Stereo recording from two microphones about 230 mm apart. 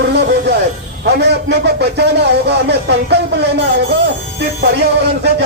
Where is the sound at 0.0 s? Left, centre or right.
Right.